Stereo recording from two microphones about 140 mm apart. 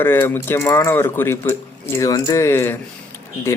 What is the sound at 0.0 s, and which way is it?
Speech, 15° left (ahead or behind).